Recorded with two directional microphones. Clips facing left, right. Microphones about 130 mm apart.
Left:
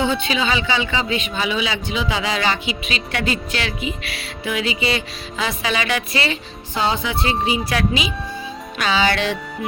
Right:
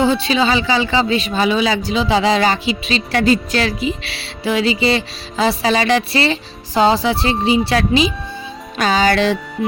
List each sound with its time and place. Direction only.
0.0 s a man's voice: 35° right (ahead or behind)